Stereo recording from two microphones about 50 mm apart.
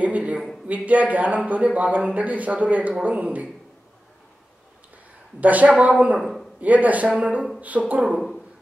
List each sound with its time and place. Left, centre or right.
0.0 s a sound: right
0.7 s a man's voice: right
5.4 s a man's voice: right
6.1 s a man's voice: centre
6.6 s a man's voice: right